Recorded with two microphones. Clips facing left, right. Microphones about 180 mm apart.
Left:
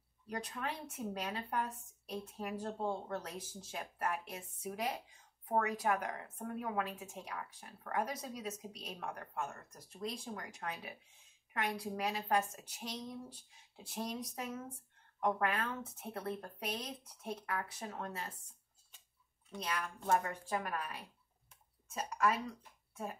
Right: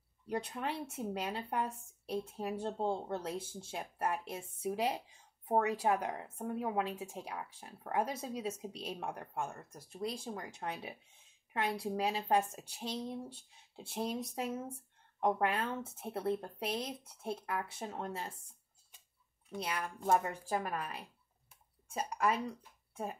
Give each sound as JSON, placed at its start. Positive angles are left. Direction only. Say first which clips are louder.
{"t": 0.3, "sound": "a woman's voice", "louder": "right 4 dB", "side_deg": -25}
{"t": 20.1, "sound": "a woman's voice", "louder": "right 2 dB", "side_deg": -30}